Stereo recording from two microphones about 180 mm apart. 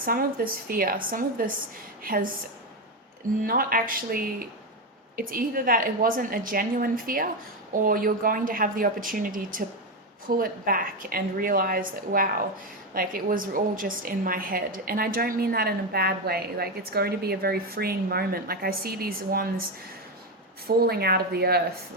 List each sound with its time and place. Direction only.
0.0 s a woman's voice: 55° right (ahead or behind)
3.4 s a woman's voice: 50° right (ahead or behind)
20.7 s a woman's voice: 60° right (ahead or behind)